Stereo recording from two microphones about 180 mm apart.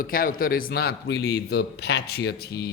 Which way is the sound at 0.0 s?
50° left (ahead or behind).